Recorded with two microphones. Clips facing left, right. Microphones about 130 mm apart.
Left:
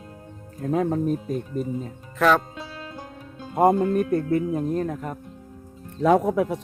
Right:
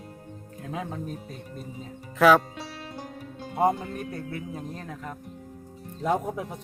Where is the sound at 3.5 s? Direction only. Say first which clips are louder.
Left 6 dB; 45° left (ahead or behind).